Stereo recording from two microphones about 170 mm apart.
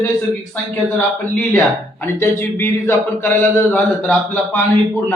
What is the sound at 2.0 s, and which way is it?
A man's voice, 15° left (ahead or behind).